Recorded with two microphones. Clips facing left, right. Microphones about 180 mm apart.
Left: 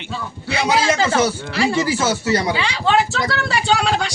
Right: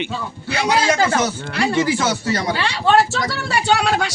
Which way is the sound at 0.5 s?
10° left (ahead or behind).